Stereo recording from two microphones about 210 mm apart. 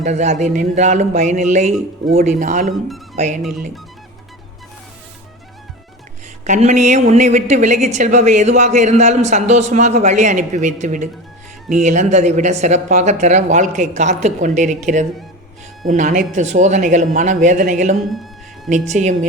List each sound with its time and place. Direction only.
0.0 s a woman's voice: 35° right (ahead or behind)
6.4 s a woman's voice: 35° right (ahead or behind)
18.1 s a sound: centre (ahead or behind)
18.7 s a woman's voice: 35° right (ahead or behind)